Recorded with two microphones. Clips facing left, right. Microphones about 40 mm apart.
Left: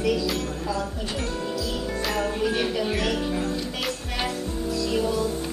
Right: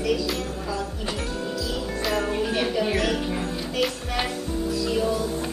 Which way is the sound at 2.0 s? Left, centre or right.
Centre.